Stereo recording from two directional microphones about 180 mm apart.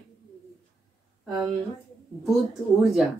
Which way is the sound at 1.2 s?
5° right (ahead or behind).